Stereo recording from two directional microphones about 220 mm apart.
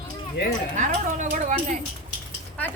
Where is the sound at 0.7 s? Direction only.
35° right (ahead or behind).